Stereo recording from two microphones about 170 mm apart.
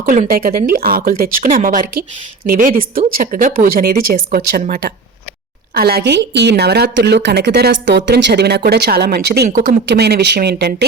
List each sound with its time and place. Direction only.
0.0 s a woman's voice: 55° right (ahead or behind); by 10.8 s 70° right (ahead or behind)